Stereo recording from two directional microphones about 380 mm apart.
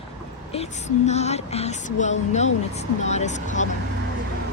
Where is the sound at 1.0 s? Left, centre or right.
Centre.